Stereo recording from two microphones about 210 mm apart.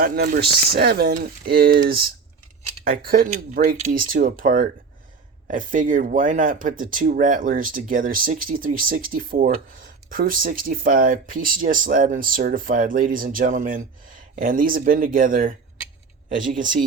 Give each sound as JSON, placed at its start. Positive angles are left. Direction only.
{"t": 0.0, "sound": "speech", "side_deg": -45}